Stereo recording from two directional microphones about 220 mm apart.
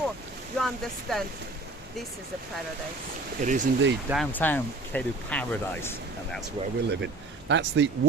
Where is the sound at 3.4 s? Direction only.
35° right (ahead or behind).